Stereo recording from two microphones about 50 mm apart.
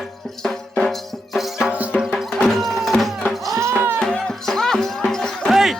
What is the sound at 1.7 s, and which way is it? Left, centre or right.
Music, right.